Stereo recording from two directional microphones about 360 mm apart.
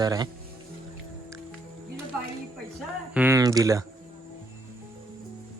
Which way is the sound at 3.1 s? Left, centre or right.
Centre.